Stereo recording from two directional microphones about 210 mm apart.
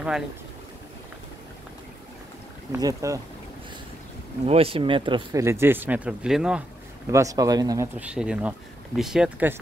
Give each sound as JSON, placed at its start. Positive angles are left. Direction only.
{"t": 2.7, "sound": "speech", "side_deg": -15}
{"t": 4.5, "sound": "speech", "side_deg": -25}
{"t": 7.1, "sound": "speech", "side_deg": -15}